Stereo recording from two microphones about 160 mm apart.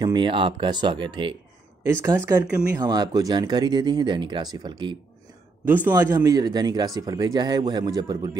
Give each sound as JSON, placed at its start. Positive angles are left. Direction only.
{"t": 0.0, "sound": "speech", "side_deg": -30}
{"t": 1.9, "sound": "speech", "side_deg": -15}
{"t": 5.7, "sound": "a man's voice", "side_deg": -10}
{"t": 5.9, "sound": "speech", "side_deg": -20}